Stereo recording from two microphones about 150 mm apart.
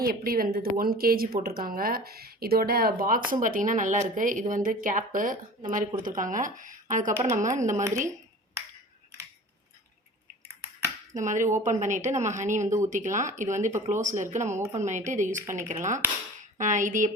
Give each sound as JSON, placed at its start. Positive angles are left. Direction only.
{"t": 0.0, "sound": "speech", "side_deg": -75}
{"t": 3.4, "sound": "a woman's voice", "side_deg": -60}
{"t": 11.1, "sound": "a woman's voice", "side_deg": -55}